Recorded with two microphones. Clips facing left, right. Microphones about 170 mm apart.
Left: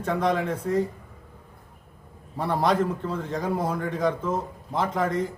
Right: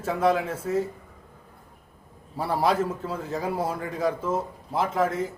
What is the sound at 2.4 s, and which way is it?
A man's voice, 5° right (ahead or behind).